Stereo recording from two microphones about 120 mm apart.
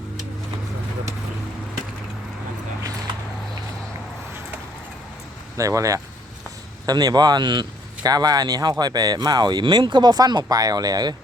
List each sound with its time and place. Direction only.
5.5 s speech: 25° right (ahead or behind)